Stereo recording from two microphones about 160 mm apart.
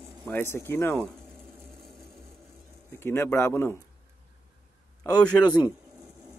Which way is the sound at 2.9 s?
15° left (ahead or behind).